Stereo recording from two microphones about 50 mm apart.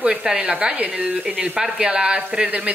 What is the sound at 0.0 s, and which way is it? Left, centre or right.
A woman's voice, centre.